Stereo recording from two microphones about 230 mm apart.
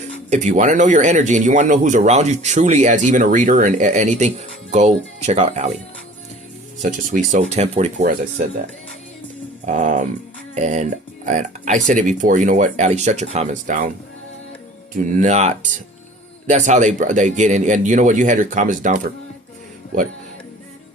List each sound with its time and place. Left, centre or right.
0.3 s speech: right
7.3 s speech: right
9.6 s speech: right
15.2 s speech: right